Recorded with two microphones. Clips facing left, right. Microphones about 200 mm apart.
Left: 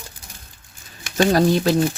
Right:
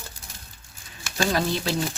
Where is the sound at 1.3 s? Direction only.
45° left (ahead or behind).